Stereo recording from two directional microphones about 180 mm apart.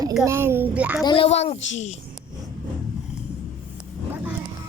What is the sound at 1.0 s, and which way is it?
Speech, 30° left (ahead or behind).